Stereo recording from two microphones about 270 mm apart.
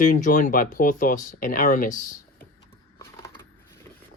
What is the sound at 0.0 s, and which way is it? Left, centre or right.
Speech, left.